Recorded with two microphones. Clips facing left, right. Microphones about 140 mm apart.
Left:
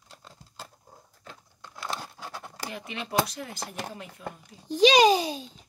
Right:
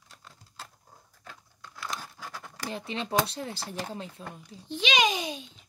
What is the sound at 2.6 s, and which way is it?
Speech, 30° right (ahead or behind).